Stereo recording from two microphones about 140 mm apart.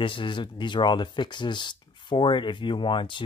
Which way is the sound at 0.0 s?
35° left (ahead or behind).